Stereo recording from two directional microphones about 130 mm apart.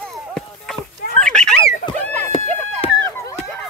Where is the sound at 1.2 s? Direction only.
5° left (ahead or behind).